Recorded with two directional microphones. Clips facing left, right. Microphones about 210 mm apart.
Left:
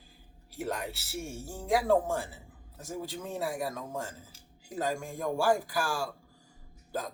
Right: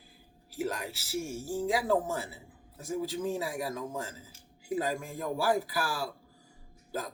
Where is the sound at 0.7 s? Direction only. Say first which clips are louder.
Left 3 dB; 55° left (ahead or behind).